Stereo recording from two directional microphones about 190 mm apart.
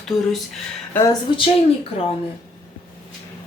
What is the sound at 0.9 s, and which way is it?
Speech, 15° left (ahead or behind).